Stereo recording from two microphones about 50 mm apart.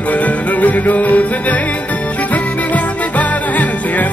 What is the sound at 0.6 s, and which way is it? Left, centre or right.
Music, left.